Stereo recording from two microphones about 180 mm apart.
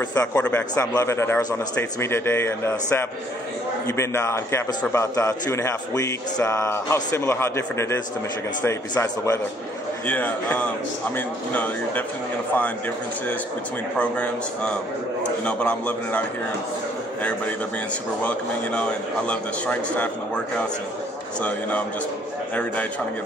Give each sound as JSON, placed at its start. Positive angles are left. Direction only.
{"t": 0.1, "sound": "a man's voice", "side_deg": 10}
{"t": 10.0, "sound": "a man's voice", "side_deg": 10}
{"t": 13.9, "sound": "a man's voice", "side_deg": 5}
{"t": 21.4, "sound": "a man's voice", "side_deg": 10}